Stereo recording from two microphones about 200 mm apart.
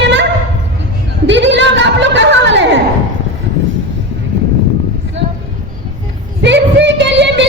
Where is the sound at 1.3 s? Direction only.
65° right (ahead or behind).